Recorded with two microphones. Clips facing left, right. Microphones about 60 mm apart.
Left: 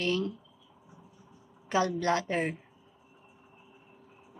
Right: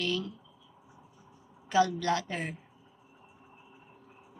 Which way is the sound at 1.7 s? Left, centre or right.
Left.